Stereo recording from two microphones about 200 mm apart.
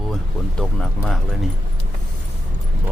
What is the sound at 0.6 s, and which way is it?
Speech, centre (ahead or behind).